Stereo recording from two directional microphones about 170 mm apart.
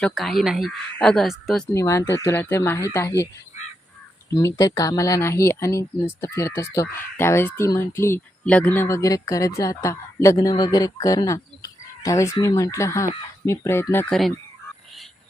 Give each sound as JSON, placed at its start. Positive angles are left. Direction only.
{"t": 0.0, "sound": "speech", "side_deg": 0}
{"t": 1.7, "sound": "speech", "side_deg": 20}
{"t": 4.3, "sound": "speech", "side_deg": 20}